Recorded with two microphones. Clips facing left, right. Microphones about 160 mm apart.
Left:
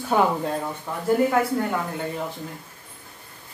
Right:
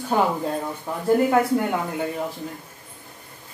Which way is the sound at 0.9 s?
15° right (ahead or behind).